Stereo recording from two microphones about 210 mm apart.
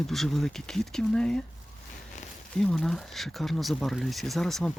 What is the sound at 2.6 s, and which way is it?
Speech, 5° left (ahead or behind).